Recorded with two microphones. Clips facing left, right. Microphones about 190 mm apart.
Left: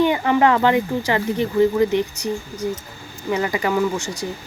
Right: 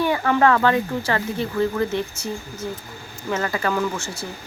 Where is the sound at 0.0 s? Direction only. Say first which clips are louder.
Left 2 dB; 20° left (ahead or behind).